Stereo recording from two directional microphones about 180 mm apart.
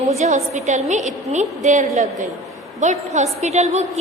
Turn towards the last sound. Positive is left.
turn(degrees=-40)  # may be behind; listen again after turning